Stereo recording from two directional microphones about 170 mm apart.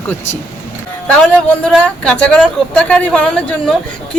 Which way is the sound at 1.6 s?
5° left (ahead or behind).